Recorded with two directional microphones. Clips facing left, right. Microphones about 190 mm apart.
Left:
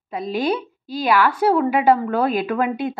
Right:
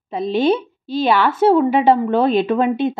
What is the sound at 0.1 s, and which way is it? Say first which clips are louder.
Speech: right 5 dB; 25° right (ahead or behind).